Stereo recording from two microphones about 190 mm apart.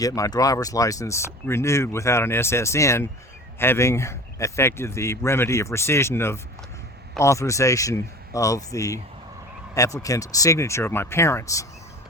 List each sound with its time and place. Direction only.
0.0 s speech: 20° left (ahead or behind)